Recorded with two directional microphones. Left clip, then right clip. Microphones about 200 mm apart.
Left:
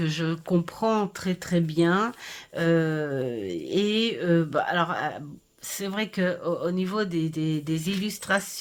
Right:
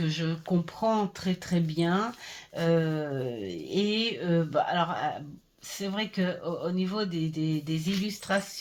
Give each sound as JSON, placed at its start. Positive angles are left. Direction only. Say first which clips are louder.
{"t": 0.0, "sound": "speech", "louder": "left 4 dB", "side_deg": 40}